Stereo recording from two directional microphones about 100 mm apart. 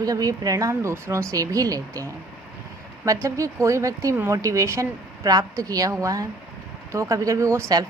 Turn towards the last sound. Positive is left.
turn(degrees=-30)  # may be behind; listen again after turning